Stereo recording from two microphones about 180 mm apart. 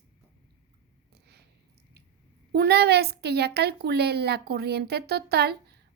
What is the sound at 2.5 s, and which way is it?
A woman's voice, 65° right (ahead or behind).